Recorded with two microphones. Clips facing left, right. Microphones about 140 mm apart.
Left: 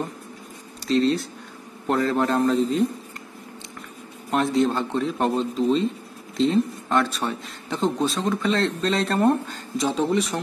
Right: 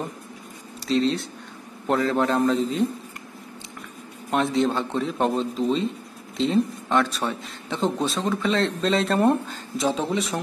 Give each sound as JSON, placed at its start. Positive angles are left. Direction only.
{"t": 0.8, "sound": "a man's voice", "side_deg": 0}
{"t": 4.3, "sound": "a man's voice", "side_deg": 0}